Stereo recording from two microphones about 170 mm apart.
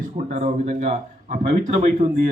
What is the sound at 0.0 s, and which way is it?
Speech, 45° right (ahead or behind).